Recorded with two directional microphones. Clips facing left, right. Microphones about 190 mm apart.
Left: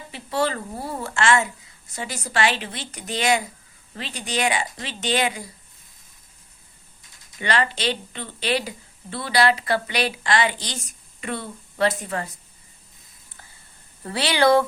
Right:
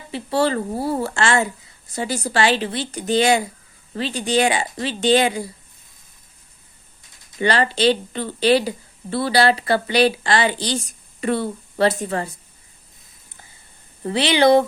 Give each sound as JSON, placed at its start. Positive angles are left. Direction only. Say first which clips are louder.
{"t": 0.1, "sound": "speech", "louder": "right 5 dB", "side_deg": -30}
{"t": 7.3, "sound": "speech", "louder": "right 5 dB", "side_deg": -35}
{"t": 14.0, "sound": "speech", "louder": "right 4 dB", "side_deg": -20}